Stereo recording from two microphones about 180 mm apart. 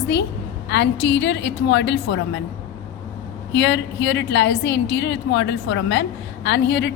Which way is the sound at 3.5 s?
80° left.